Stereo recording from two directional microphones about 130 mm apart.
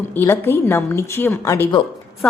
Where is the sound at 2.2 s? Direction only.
10° left (ahead or behind).